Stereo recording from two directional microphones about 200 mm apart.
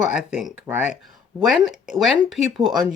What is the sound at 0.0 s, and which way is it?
Speech, 5° right (ahead or behind).